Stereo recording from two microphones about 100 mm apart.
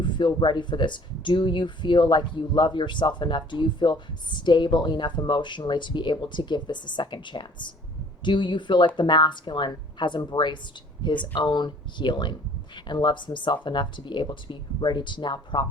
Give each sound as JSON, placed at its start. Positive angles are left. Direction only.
{"t": 0.0, "sound": "speech", "side_deg": 50}